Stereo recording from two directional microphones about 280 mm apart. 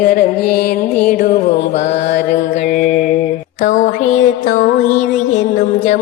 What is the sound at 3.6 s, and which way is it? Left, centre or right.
Music, left.